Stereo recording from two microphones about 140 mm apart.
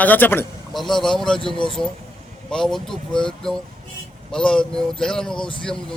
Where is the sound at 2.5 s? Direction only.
5° left (ahead or behind).